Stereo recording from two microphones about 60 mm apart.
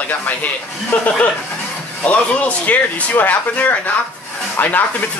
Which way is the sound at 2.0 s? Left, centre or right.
Left.